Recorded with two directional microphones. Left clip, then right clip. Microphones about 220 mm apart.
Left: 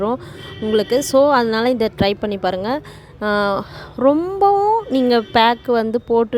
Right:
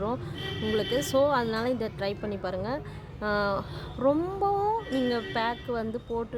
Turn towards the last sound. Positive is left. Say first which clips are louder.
# left 15 dB
turn(degrees=40)  # may be behind; listen again after turning